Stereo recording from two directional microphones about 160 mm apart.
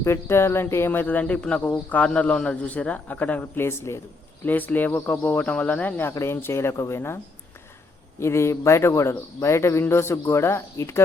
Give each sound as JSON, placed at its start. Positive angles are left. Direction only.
{"t": 0.0, "sound": "speech", "side_deg": 15}
{"t": 8.2, "sound": "speech", "side_deg": 15}